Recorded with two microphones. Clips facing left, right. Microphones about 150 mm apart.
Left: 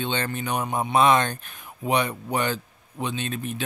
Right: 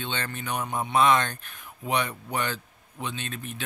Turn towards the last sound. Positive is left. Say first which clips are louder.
# left 6 dB
turn(degrees=15)  # may be behind; listen again after turning